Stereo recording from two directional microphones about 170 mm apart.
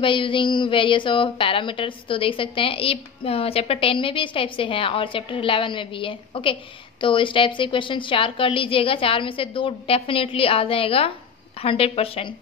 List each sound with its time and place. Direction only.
0.0 s speech: 30° left (ahead or behind)